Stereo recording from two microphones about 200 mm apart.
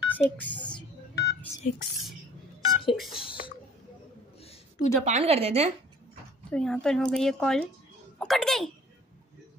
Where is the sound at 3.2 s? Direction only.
25° left (ahead or behind).